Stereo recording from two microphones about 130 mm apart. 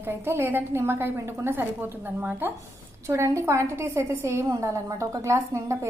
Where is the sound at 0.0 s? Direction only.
20° right (ahead or behind).